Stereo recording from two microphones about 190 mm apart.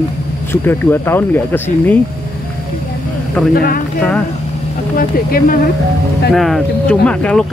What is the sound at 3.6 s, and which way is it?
Speech, 50° left (ahead or behind).